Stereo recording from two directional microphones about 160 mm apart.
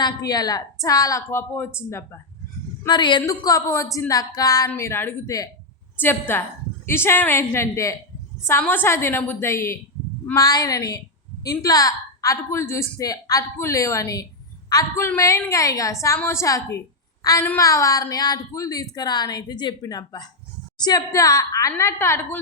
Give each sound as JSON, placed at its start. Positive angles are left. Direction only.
{"t": 0.0, "sound": "a woman's voice", "side_deg": 25}
{"t": 2.8, "sound": "a woman's voice", "side_deg": 30}